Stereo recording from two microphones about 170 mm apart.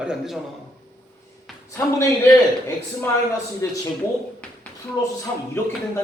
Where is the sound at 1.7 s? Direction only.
15° left (ahead or behind).